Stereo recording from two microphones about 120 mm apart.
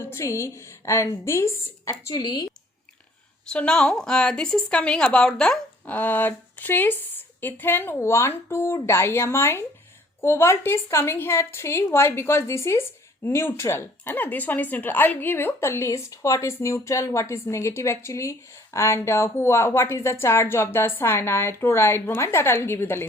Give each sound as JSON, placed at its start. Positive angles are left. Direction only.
{"t": 0.0, "sound": "a woman's voice", "side_deg": 20}
{"t": 3.4, "sound": "a woman's voice", "side_deg": 10}